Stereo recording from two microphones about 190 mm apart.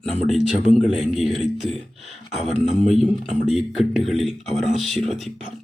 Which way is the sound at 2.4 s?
35° left (ahead or behind).